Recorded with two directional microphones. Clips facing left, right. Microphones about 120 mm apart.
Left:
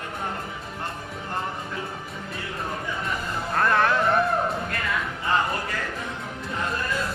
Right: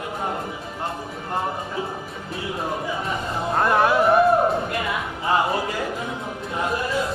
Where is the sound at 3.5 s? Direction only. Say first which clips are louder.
Right 3 dB; 20° right (ahead or behind).